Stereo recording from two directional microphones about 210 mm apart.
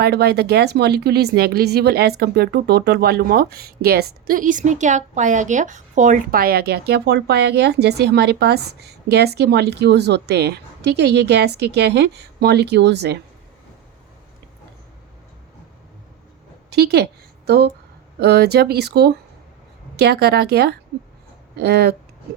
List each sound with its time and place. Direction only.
0.0 s speech: 50° right (ahead or behind)
16.6 s a sound: 50° right (ahead or behind)
18.2 s speech: 50° right (ahead or behind)